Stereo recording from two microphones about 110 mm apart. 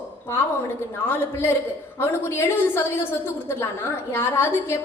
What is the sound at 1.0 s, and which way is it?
A woman's voice, 20° left (ahead or behind).